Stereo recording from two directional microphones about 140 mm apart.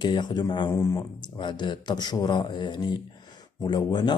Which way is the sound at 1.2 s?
35° left (ahead or behind).